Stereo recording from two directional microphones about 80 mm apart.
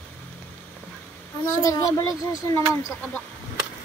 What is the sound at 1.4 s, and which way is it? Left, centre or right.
A child's voice, left.